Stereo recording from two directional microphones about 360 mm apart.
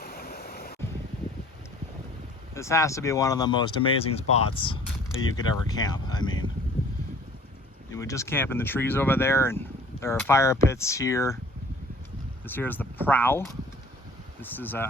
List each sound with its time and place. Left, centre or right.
0.0 s waves: left
2.6 s speech: centre
7.9 s speech: centre
12.5 s speech: centre
14.5 s speech: centre